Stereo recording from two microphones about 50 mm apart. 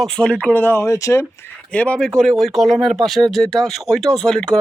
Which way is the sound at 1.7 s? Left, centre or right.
Left.